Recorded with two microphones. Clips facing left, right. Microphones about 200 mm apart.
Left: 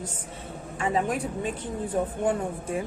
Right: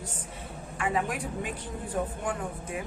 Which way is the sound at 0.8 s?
25° left (ahead or behind).